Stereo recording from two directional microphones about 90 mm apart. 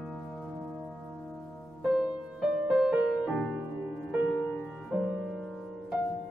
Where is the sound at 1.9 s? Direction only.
5° right (ahead or behind).